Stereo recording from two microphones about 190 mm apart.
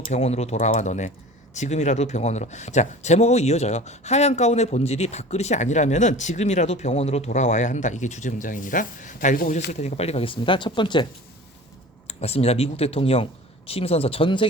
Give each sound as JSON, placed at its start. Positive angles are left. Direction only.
{"t": 0.1, "sound": "speech", "side_deg": 35}
{"t": 9.7, "sound": "speech", "side_deg": 35}